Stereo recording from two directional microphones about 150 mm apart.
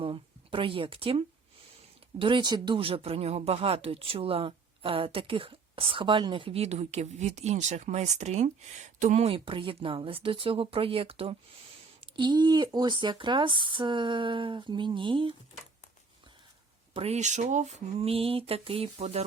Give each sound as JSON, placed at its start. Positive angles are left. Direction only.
{"t": 0.0, "sound": "a sound", "side_deg": -35}
{"t": 2.1, "sound": "speech", "side_deg": -35}
{"t": 16.9, "sound": "speech", "side_deg": -45}